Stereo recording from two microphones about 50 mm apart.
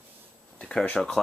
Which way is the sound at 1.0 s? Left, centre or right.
Centre.